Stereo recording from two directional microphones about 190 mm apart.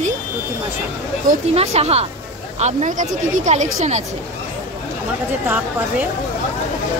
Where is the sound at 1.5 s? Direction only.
35° right (ahead or behind).